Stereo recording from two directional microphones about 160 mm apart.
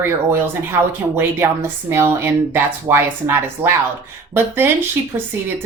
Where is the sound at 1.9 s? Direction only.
15° right (ahead or behind).